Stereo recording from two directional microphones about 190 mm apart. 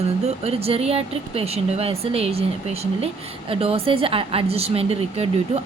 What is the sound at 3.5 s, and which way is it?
A woman's voice, 30° right (ahead or behind).